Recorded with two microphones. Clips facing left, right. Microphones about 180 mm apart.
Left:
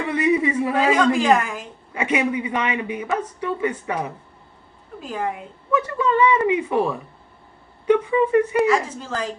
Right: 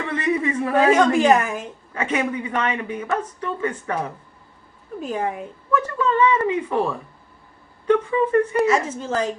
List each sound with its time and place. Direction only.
0.0 s a man's voice: 10° left (ahead or behind)
0.9 s a woman's voice: 20° right (ahead or behind)
1.9 s a man's voice: 10° left (ahead or behind)
5.0 s a woman's voice: 20° right (ahead or behind)
5.7 s a man's voice: 10° left (ahead or behind)
9.0 s a woman's voice: 20° right (ahead or behind)